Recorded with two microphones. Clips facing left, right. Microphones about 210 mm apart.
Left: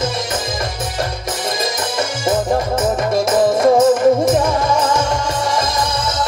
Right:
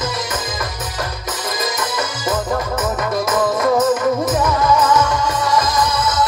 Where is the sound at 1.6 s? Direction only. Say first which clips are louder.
Even; 25° left (ahead or behind).